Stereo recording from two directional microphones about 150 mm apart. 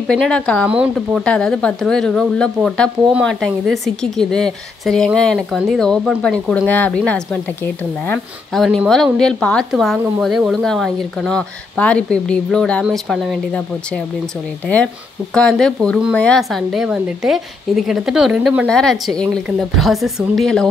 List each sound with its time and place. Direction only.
0.1 s speech: 5° left (ahead or behind)
0.7 s speech: 5° right (ahead or behind)
0.9 s a woman's voice: 5° left (ahead or behind)
8.6 s a woman's voice: centre (ahead or behind)
15.3 s a woman's voice: 5° left (ahead or behind)